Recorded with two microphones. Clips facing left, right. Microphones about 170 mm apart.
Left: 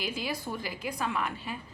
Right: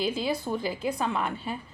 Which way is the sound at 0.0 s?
25° right (ahead or behind).